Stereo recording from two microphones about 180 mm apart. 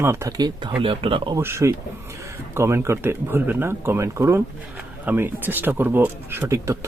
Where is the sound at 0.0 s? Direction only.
15° right (ahead or behind).